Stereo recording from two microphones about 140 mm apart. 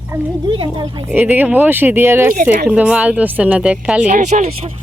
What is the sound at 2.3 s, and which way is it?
Speech, 85° right.